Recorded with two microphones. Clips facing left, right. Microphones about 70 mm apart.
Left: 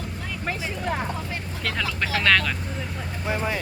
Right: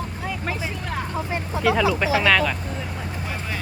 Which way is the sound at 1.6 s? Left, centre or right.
Centre.